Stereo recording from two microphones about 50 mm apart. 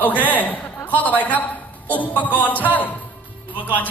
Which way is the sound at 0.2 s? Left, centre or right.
Left.